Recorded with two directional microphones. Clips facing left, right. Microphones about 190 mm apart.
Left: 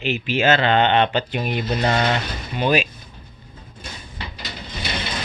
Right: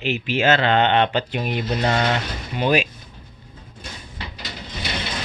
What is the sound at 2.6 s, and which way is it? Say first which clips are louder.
Speech: even; 10° right (ahead or behind).